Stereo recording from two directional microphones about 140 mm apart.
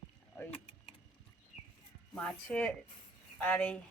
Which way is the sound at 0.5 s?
40° left (ahead or behind).